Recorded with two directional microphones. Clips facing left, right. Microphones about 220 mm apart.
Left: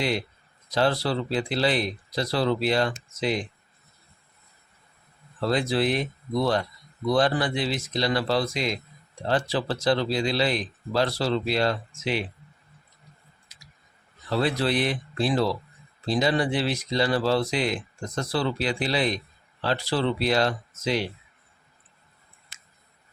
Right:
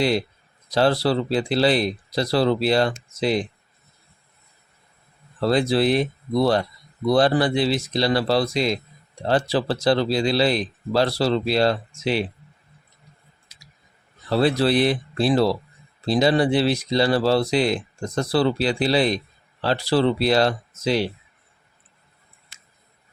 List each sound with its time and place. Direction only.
0.7 s speech: 35° right (ahead or behind)
5.4 s speech: 35° right (ahead or behind)
14.3 s speech: 35° right (ahead or behind)